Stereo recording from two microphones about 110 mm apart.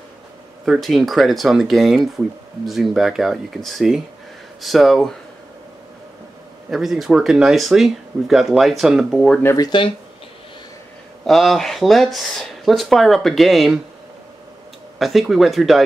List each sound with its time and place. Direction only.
0.7 s speech: centre (ahead or behind)
6.7 s speech: 5° right (ahead or behind)
9.6 s speech: 45° left (ahead or behind)
11.2 s speech: centre (ahead or behind)
15.0 s speech: centre (ahead or behind)